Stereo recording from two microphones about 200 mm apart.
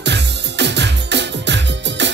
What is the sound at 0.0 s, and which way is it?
Music, 60° right (ahead or behind).